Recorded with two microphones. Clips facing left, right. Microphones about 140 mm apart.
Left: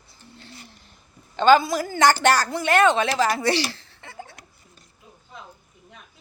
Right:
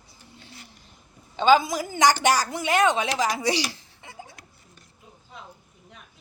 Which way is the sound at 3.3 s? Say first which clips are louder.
Left 3 dB; 15° right (ahead or behind).